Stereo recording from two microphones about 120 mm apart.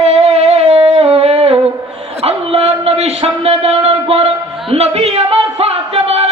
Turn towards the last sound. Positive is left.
turn(degrees=-60)  # may be behind; listen again after turning